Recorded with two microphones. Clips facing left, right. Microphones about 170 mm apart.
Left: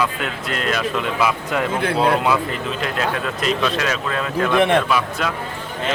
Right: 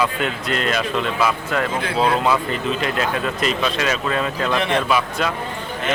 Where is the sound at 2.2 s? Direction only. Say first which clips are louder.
Right 1 dB; centre (ahead or behind).